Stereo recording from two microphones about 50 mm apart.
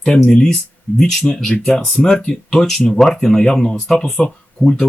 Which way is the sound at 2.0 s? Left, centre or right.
Centre.